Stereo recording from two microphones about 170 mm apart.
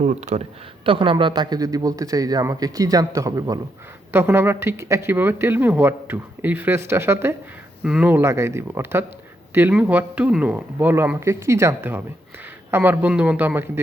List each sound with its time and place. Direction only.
0.0 s speech: 45° right (ahead or behind)
0.9 s a man's voice: 30° right (ahead or behind); by 13.7 s 10° right (ahead or behind)